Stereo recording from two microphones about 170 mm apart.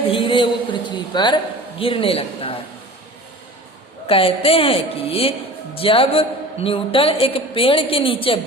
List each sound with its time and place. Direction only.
0.0 s a sound: 30° left (ahead or behind)
1.8 s a man's voice: 30° left (ahead or behind)
4.0 s a man's voice: 35° left (ahead or behind)